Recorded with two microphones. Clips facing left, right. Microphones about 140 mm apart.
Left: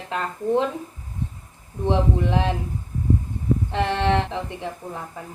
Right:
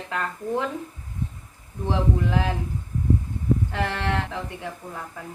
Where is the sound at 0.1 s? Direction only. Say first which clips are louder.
Left 5 dB; 20° left (ahead or behind).